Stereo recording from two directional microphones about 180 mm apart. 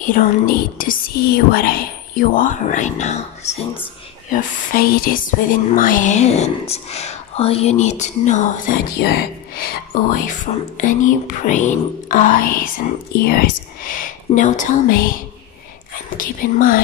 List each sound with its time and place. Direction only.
0.0 s a woman's voice: 50° left (ahead or behind)
4.3 s speech: 50° left (ahead or behind)